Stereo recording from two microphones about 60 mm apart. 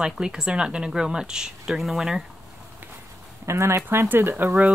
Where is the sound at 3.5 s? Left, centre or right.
Right.